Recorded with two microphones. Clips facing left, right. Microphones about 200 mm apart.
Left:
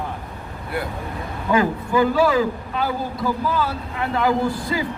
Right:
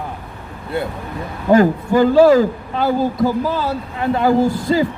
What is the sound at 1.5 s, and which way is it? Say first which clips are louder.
Speech: right 7 dB; 45° right (ahead or behind).